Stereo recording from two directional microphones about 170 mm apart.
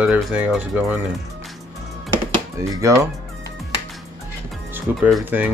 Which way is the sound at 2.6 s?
20° right (ahead or behind).